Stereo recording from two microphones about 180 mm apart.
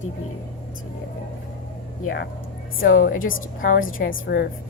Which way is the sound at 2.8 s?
50° left (ahead or behind).